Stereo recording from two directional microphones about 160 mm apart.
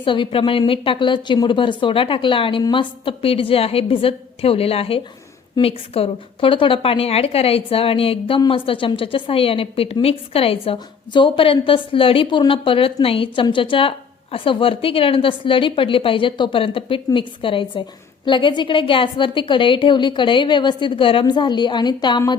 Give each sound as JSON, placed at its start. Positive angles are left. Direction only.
{"t": 0.0, "sound": "a woman's voice", "side_deg": 30}